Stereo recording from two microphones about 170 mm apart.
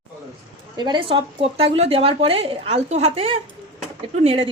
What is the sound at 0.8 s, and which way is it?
A woman's voice, 30° right (ahead or behind).